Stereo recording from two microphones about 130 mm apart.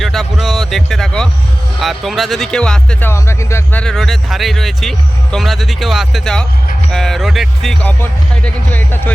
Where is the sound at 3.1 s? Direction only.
20° left (ahead or behind).